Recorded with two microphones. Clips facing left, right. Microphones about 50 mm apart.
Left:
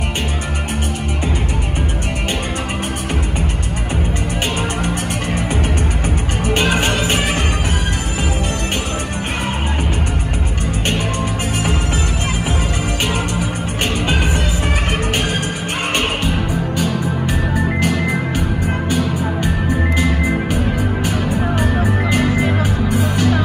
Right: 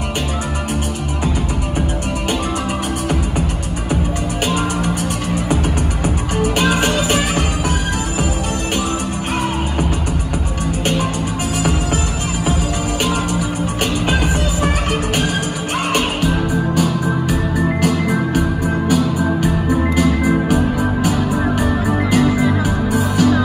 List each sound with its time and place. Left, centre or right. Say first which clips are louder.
4.8 s music: right 1 dB; left
14.0 s music: right 1 dB; left
15.9 s music: right 1 dB; left
22.1 s music: right 4 dB; left